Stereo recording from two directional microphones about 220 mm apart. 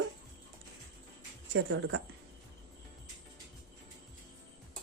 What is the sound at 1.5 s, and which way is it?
Speech, 55° right (ahead or behind).